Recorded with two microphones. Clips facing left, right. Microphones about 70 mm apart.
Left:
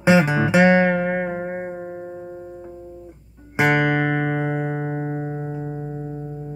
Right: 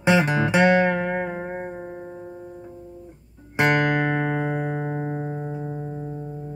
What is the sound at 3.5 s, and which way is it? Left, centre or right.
Music, centre.